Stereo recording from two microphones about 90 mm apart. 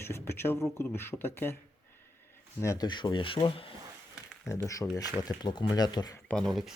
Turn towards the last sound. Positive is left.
turn(degrees=0)  # may be behind; listen again after turning